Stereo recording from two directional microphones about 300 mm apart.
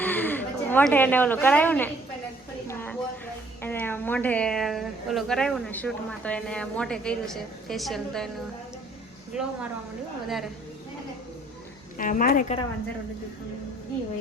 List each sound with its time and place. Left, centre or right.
0.0 s a sound: centre
2.6 s a woman's voice: centre
9.3 s a woman's voice: centre
11.9 s a woman's voice: left